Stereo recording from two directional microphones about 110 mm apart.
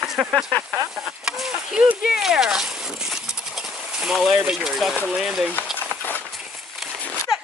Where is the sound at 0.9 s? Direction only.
5° right (ahead or behind).